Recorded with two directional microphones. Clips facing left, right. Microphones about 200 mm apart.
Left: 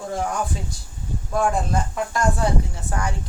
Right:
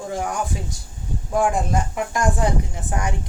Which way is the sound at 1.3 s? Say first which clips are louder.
Right 1 dB; 15° right (ahead or behind).